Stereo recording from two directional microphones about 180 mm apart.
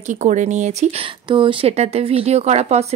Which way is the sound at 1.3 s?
30° right (ahead or behind).